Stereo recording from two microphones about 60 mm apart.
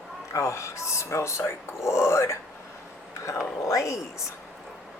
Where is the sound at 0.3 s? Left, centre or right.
Left.